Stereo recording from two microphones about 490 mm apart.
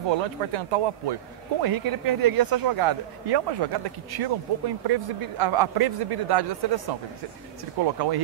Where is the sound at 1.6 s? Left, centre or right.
Right.